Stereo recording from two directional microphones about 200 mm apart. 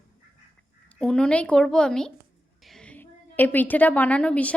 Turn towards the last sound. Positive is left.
turn(degrees=5)  # may be behind; listen again after turning